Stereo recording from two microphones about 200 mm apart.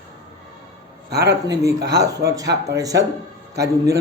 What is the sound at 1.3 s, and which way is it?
A man's voice, 15° right (ahead or behind).